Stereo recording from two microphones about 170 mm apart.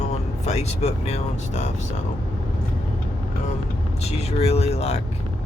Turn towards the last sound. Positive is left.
turn(degrees=40)  # may be behind; listen again after turning